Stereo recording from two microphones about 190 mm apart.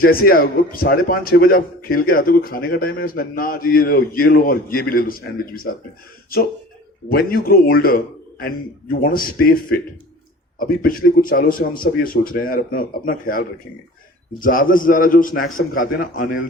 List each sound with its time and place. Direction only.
0.0 s a man's voice: 50° left (ahead or behind)
7.1 s a man's voice: 50° left (ahead or behind)